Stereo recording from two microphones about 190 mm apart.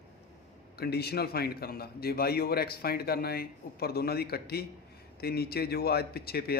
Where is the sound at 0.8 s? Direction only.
55° left (ahead or behind).